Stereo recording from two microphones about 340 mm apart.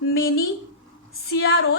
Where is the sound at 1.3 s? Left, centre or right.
Left.